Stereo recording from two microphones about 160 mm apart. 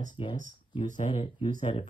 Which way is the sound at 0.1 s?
30° left (ahead or behind).